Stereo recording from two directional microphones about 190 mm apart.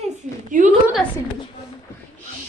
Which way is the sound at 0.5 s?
45° right (ahead or behind).